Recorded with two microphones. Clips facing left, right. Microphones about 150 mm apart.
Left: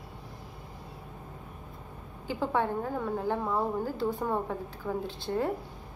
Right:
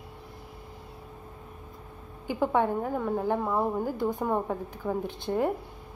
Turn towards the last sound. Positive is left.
turn(degrees=-15)  # may be behind; listen again after turning